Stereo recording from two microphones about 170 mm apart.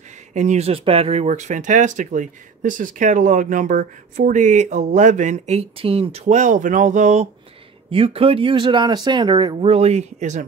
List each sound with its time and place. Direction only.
0.3 s speech: 45° right (ahead or behind)
7.9 s speech: 30° right (ahead or behind)